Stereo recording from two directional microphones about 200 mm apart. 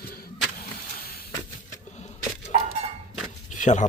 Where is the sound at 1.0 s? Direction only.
50° left (ahead or behind).